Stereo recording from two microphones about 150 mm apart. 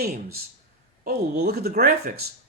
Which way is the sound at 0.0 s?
90° right.